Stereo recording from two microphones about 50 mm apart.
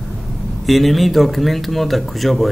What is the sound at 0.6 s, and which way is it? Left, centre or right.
Speech, centre.